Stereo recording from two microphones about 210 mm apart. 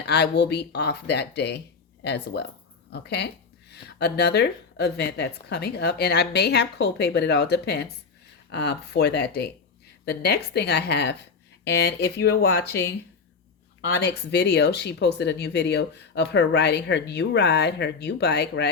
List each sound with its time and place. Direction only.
0.0 s speech: 50° left (ahead or behind)
13.8 s speech: 55° left (ahead or behind)